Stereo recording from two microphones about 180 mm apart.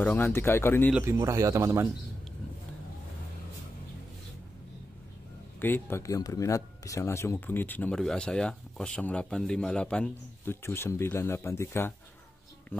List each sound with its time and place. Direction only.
0.0 s speech: 10° left (ahead or behind)
1.0 s a man's voice: 15° right (ahead or behind)
5.6 s speech: 10° left (ahead or behind)